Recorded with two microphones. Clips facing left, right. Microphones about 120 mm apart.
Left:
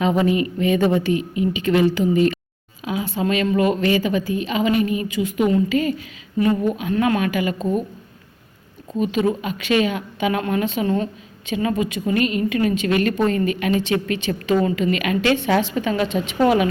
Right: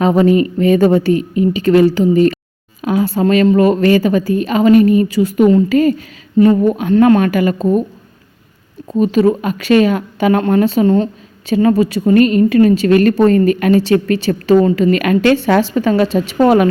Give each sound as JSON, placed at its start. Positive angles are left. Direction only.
{"t": 0.0, "sound": "a woman's voice", "side_deg": -40}
{"t": 8.9, "sound": "speech", "side_deg": -40}